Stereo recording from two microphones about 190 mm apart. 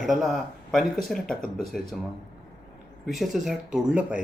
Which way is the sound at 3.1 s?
Centre (ahead or behind).